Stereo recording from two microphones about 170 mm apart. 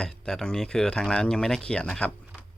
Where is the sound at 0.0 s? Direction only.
5° left (ahead or behind).